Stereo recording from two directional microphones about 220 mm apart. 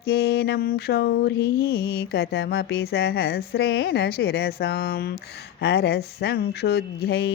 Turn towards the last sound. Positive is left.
turn(degrees=50)  # may be behind; listen again after turning